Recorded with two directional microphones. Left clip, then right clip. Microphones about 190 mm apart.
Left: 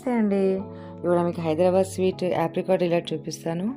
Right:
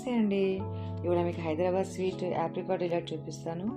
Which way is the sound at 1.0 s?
35° left (ahead or behind).